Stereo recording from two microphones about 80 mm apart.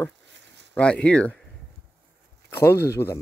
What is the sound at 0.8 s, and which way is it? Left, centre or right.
Speech, centre.